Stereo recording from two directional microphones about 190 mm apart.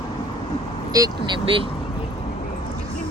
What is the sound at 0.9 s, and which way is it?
Speech, 20° right (ahead or behind).